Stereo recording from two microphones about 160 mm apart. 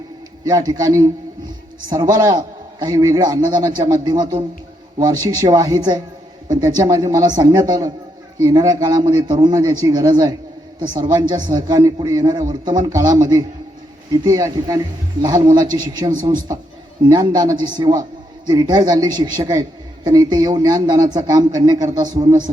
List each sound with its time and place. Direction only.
0.4 s a man's voice: 25° right (ahead or behind)
2.2 s a man's voice: 25° right (ahead or behind)